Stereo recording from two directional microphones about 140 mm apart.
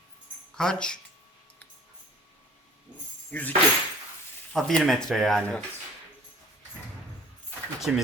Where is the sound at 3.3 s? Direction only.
10° left (ahead or behind).